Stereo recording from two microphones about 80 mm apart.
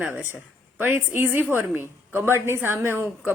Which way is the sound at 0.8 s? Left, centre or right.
Right.